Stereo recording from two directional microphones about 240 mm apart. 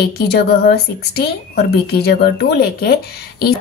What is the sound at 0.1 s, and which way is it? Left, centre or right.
A woman's voice, left.